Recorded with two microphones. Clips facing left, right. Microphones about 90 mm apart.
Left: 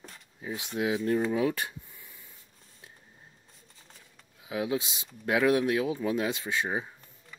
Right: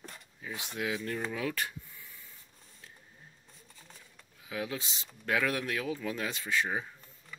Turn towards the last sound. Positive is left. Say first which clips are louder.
# left 1 dB
turn(degrees=20)  # may be behind; listen again after turning